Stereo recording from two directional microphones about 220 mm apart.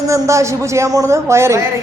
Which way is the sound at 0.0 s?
15° right (ahead or behind).